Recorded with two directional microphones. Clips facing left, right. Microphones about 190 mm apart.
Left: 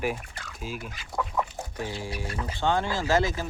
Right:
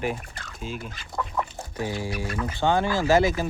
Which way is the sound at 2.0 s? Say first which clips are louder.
Right 4 dB; 30° left (ahead or behind).